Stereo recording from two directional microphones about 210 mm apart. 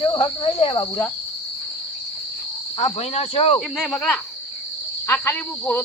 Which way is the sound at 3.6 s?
Centre (ahead or behind).